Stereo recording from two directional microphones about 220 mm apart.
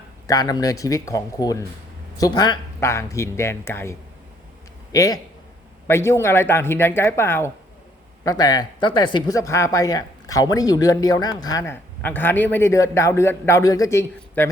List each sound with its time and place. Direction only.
0.3 s speech: 15° left (ahead or behind)